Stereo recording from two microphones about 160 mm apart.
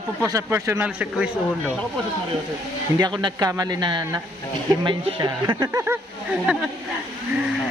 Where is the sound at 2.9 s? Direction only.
25° right (ahead or behind).